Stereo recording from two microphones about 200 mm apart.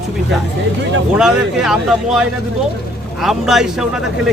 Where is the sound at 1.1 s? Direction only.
Centre (ahead or behind).